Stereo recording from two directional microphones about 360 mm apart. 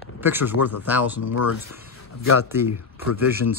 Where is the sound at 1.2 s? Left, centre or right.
Left.